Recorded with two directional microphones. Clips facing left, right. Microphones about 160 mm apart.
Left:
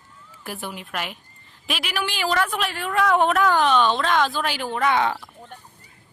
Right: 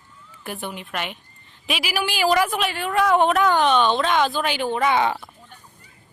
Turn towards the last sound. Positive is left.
turn(degrees=-5)  # may be behind; listen again after turning